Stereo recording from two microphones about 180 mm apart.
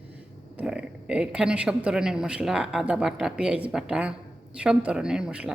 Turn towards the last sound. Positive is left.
turn(degrees=-5)  # may be behind; listen again after turning